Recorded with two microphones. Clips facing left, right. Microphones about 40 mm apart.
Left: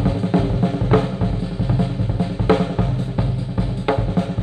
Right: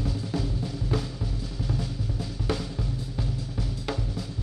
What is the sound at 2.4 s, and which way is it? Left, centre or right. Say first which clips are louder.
Music: left 14 dB; left.